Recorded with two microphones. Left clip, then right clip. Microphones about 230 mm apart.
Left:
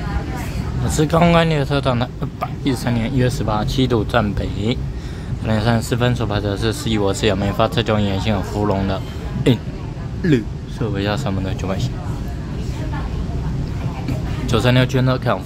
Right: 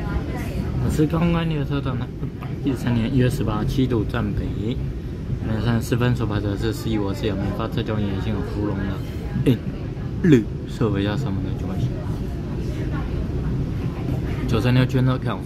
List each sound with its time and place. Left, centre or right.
0.9 s speech: centre
2.8 s speech: centre
10.2 s a man's voice: centre
11.0 s speech: centre
14.5 s speech: centre